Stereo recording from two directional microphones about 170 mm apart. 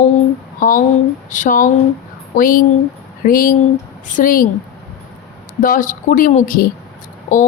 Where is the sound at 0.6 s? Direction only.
50° left (ahead or behind).